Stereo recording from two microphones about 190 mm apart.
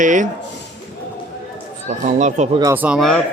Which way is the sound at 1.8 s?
40° right (ahead or behind).